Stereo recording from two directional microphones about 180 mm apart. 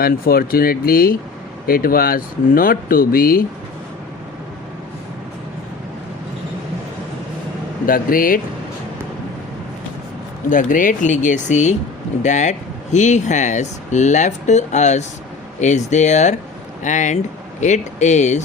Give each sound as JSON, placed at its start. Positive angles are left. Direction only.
{"t": 0.0, "sound": "speech", "side_deg": 55}
{"t": 7.9, "sound": "speech", "side_deg": 50}
{"t": 10.5, "sound": "speech", "side_deg": 45}